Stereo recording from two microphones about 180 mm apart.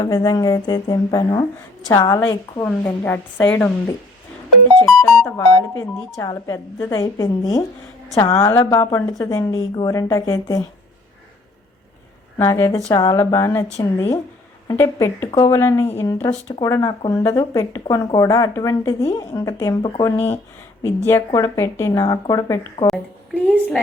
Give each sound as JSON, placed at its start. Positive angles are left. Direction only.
{"t": 0.0, "sound": "a woman's voice", "side_deg": 20}
{"t": 6.1, "sound": "speech", "side_deg": 20}
{"t": 12.4, "sound": "a woman's voice", "side_deg": 15}
{"t": 22.9, "sound": "a woman's voice", "side_deg": -10}